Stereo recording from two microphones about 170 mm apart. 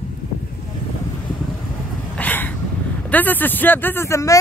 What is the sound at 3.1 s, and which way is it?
Speech, 10° left (ahead or behind).